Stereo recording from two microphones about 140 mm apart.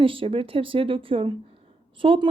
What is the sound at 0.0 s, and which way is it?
Speech, 40° right (ahead or behind).